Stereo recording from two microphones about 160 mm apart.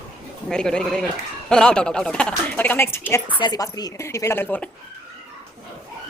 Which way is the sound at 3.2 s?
30° left (ahead or behind).